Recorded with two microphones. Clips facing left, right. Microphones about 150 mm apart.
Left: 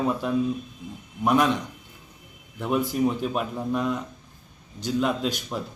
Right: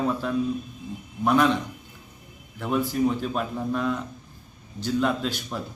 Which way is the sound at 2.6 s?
10° left (ahead or behind).